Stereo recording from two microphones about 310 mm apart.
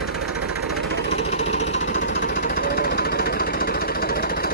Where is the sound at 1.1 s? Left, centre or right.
Left.